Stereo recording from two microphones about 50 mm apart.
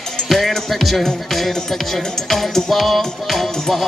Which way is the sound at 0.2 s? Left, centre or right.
Centre.